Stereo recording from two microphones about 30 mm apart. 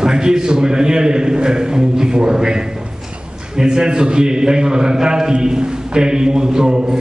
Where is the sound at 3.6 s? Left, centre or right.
Right.